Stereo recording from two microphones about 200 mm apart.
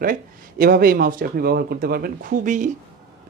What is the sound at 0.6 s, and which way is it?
Speech, 45° right (ahead or behind).